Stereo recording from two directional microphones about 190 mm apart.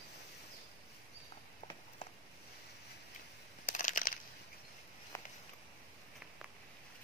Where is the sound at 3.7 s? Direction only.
45° left (ahead or behind).